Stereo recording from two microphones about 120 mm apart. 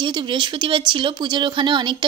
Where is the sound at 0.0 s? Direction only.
40° right (ahead or behind).